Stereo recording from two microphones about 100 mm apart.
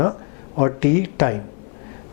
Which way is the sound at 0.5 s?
15° left (ahead or behind).